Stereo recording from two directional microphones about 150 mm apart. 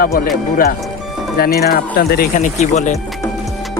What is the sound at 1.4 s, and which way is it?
Speech, 90° left.